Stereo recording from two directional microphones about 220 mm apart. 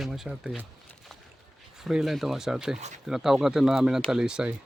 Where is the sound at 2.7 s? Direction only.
30° right (ahead or behind).